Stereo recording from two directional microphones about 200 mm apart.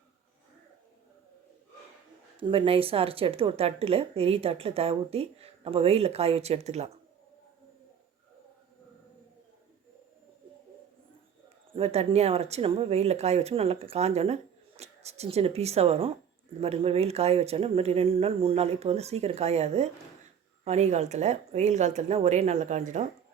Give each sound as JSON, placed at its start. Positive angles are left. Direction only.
{"t": 2.4, "sound": "speech", "side_deg": -25}
{"t": 11.7, "sound": "speech", "side_deg": -30}